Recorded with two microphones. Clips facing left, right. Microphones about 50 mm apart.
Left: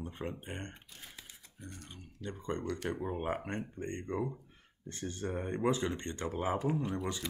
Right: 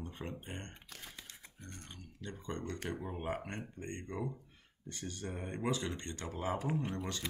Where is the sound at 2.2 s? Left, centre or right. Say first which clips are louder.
Left 4 dB; left.